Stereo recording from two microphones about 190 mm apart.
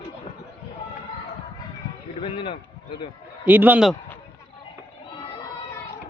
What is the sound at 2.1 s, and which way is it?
Speech, 30° left (ahead or behind).